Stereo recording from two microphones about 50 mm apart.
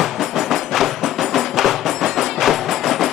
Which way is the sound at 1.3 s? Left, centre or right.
Centre.